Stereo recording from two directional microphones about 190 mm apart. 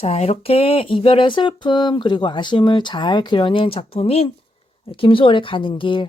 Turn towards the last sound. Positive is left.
turn(degrees=25)  # may be behind; listen again after turning